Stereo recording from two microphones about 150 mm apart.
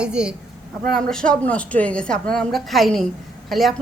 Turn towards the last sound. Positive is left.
turn(degrees=0)  # may be behind; listen again after turning